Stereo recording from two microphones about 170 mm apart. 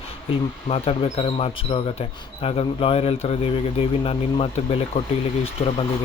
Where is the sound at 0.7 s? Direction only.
35° left (ahead or behind).